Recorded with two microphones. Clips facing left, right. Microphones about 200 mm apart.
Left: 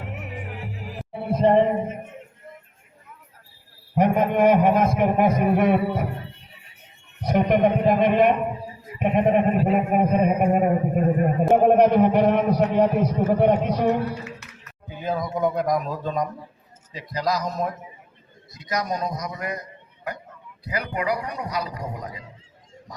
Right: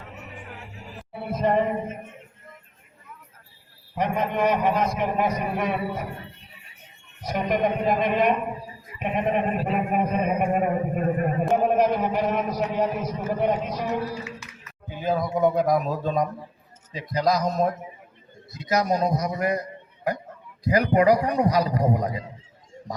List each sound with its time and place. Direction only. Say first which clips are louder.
1.1 s music: left 5 dB; 30° left (ahead or behind)
3.9 s a man's voice: left 6 dB; 50° left (ahead or behind)
7.3 s a man's voice: left 5 dB; 55° left (ahead or behind)
11.5 s a man's voice: left 6 dB; 60° left (ahead or behind)
14.8 s speech: right 2 dB; centre (ahead or behind)
16.9 s a man's voice: right 3 dB; 25° right (ahead or behind)
20.7 s a man's voice: right 8 dB; 40° right (ahead or behind)